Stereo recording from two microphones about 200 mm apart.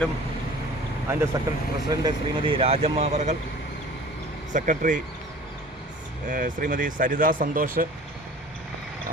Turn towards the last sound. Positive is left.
turn(degrees=-45)  # may be behind; listen again after turning